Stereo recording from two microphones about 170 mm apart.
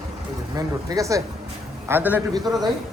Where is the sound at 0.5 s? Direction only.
20° right (ahead or behind).